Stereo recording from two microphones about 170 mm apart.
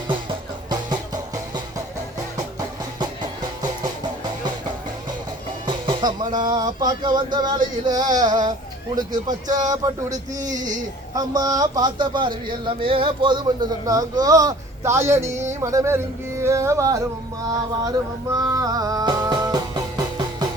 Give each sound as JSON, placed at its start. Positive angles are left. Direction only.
{"t": 0.7, "sound": "music", "side_deg": -25}
{"t": 5.6, "sound": "music", "side_deg": -30}
{"t": 6.3, "sound": "a man's voice", "side_deg": -25}
{"t": 18.3, "sound": "music", "side_deg": -20}